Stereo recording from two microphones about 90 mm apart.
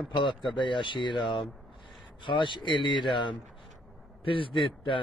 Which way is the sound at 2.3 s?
60° left (ahead or behind).